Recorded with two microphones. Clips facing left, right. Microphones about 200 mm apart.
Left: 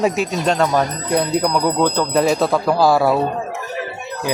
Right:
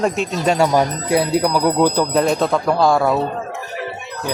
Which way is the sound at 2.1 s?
5° left (ahead or behind).